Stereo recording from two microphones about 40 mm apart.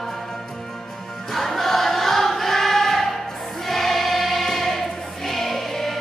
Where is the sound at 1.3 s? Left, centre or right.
Centre.